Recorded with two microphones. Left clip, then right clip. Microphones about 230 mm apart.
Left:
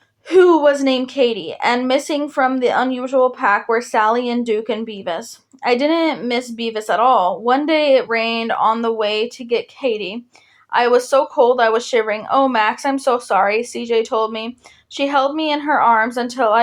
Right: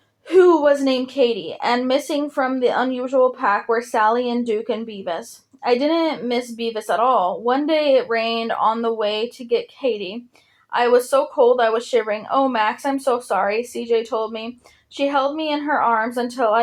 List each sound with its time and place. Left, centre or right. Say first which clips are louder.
0.3 s a woman's voice: left 2 dB; left